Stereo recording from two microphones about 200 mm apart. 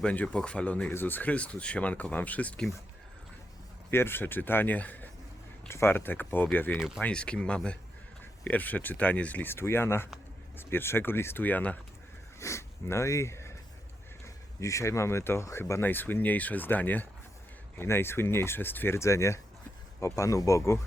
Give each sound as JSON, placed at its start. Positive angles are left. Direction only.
{"t": 0.0, "sound": "speech", "side_deg": 5}
{"t": 3.9, "sound": "speech", "side_deg": 10}
{"t": 6.7, "sound": "speech", "side_deg": 0}
{"t": 14.6, "sound": "speech", "side_deg": 15}